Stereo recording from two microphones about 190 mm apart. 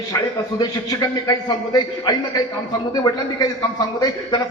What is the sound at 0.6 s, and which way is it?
A man's voice, 20° left (ahead or behind).